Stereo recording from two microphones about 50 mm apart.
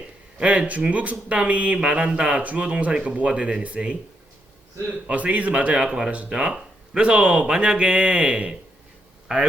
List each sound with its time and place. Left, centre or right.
0.3 s speech: right
5.0 s speech: right